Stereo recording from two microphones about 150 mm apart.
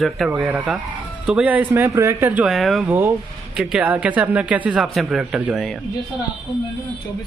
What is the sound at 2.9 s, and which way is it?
Speech, 10° right (ahead or behind).